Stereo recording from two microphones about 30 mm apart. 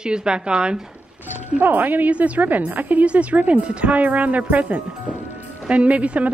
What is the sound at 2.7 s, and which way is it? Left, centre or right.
Speech, right.